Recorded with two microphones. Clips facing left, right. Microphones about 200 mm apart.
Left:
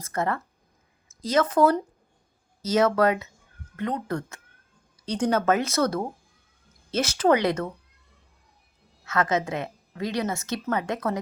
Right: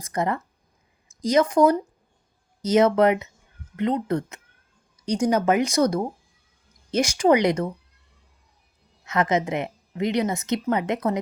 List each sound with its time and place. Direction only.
0.0 s a woman's voice: 15° right (ahead or behind)
9.0 s a woman's voice: 20° right (ahead or behind)